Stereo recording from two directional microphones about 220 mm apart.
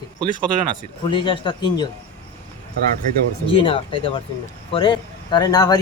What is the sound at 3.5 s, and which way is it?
Speech, 25° left (ahead or behind).